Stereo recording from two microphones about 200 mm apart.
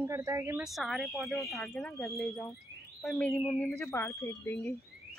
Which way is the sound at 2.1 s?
Centre (ahead or behind).